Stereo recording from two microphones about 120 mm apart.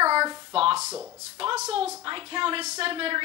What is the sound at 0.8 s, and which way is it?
Speech, 20° right (ahead or behind).